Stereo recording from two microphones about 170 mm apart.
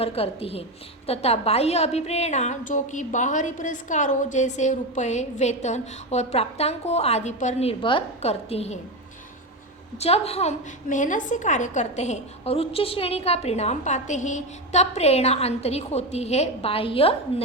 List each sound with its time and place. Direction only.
0.0 s a woman's voice: 35° left (ahead or behind)
10.0 s a woman's voice: 35° left (ahead or behind)